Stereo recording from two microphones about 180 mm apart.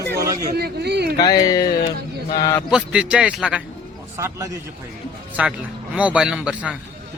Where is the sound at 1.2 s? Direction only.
20° left (ahead or behind).